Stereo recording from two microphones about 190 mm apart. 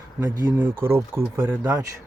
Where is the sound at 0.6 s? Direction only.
10° right (ahead or behind).